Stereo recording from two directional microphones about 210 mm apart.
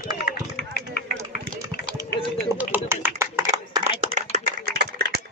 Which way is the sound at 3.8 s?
40° right (ahead or behind).